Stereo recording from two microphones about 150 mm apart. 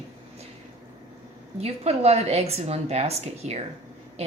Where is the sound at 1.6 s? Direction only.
45° right (ahead or behind).